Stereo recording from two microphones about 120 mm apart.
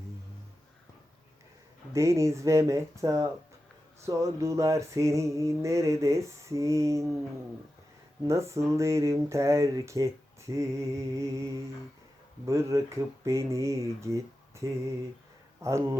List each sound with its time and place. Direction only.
1.9 s mantra: 25° right (ahead or behind)
8.3 s mantra: 25° right (ahead or behind)